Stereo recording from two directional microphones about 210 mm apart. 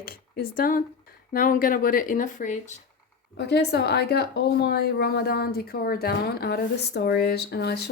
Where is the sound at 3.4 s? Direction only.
55° left (ahead or behind).